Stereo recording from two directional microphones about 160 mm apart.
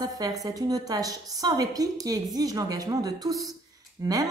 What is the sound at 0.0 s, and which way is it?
Speech, 25° right (ahead or behind).